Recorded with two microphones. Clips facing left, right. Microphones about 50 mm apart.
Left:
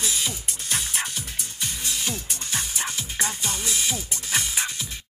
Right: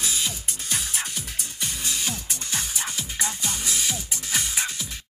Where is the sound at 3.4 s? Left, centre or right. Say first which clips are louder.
Left 1 dB; left.